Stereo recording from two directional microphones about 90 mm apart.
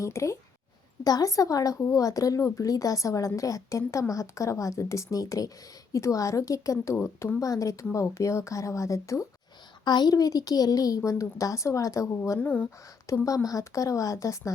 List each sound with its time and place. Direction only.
0.0 s speech: 35° left (ahead or behind)
9.8 s speech: 55° left (ahead or behind); by 12.4 s 35° left (ahead or behind)
12.4 s speech: 20° left (ahead or behind)
13.2 s speech: 40° left (ahead or behind)